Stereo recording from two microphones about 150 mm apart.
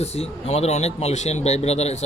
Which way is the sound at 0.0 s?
45° left (ahead or behind).